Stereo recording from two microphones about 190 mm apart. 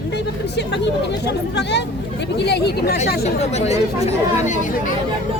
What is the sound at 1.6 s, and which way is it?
Speech, 65° left (ahead or behind).